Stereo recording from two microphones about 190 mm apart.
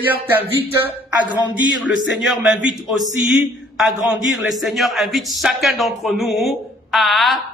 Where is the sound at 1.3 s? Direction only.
25° left (ahead or behind).